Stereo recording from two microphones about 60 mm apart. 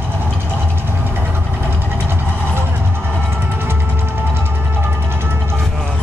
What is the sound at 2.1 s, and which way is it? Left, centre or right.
Vehicle, right.